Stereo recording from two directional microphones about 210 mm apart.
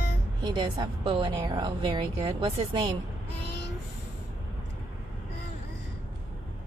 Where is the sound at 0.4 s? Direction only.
20° right (ahead or behind).